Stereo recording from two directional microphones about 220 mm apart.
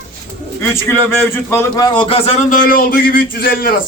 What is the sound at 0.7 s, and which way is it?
A man's voice, 10° left (ahead or behind).